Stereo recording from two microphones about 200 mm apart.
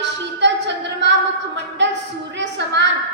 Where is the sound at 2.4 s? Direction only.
60° right (ahead or behind).